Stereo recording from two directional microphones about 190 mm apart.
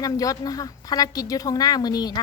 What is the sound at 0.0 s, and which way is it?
Speech, 20° left (ahead or behind).